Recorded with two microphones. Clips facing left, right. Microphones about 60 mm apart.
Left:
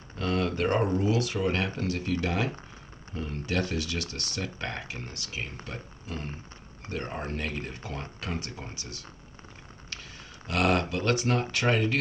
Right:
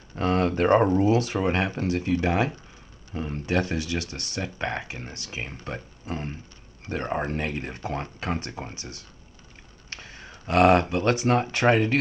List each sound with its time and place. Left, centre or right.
0.1 s speech: right